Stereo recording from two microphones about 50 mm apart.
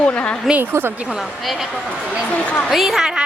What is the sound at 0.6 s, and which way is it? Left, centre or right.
Speech, right.